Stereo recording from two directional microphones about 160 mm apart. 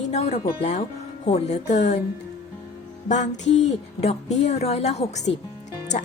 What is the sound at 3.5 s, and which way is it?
A woman's voice, 40° left (ahead or behind).